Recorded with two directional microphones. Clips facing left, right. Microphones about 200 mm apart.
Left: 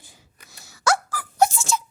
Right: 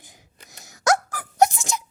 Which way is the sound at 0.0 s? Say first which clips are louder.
Right 2 dB; 20° right (ahead or behind).